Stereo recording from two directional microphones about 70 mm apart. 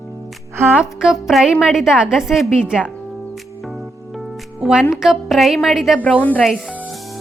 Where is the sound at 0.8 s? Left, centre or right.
Centre.